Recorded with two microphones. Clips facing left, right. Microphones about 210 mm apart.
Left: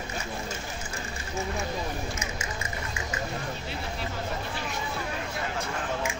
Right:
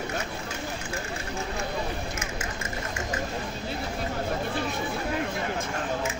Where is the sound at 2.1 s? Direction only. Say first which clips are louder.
Right 1 dB; 55° right (ahead or behind).